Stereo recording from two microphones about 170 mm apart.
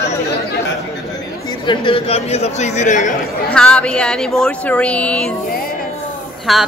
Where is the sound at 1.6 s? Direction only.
30° left (ahead or behind); by 3.1 s 45° left (ahead or behind).